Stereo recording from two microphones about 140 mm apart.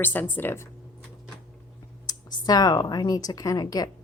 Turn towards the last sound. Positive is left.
turn(degrees=25)  # may be behind; listen again after turning